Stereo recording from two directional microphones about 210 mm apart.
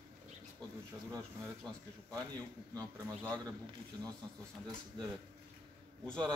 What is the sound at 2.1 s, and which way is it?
Speech, 20° right (ahead or behind).